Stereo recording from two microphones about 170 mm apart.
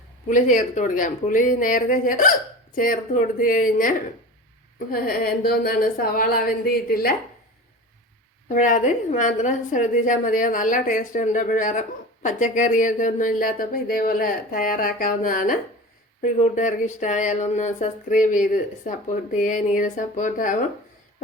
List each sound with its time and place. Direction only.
0.3 s a woman's voice: 45° left (ahead or behind)
8.4 s a woman's voice: 50° left (ahead or behind)